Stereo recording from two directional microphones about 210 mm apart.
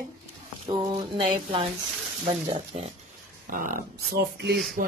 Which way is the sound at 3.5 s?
40° right (ahead or behind).